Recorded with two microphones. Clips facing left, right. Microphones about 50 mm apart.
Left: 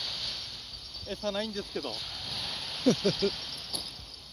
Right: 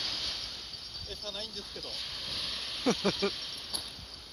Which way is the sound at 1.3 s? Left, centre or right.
Left.